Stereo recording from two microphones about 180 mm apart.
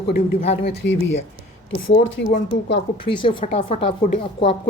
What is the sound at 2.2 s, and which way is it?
Speech, 65° left (ahead or behind).